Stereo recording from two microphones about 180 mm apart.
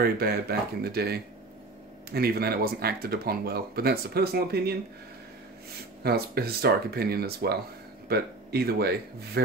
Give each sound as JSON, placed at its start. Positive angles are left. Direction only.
{"t": 0.0, "sound": "speech", "side_deg": -60}
{"t": 6.0, "sound": "speech", "side_deg": -60}